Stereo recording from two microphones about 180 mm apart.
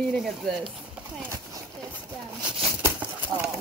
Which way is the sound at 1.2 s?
15° right (ahead or behind).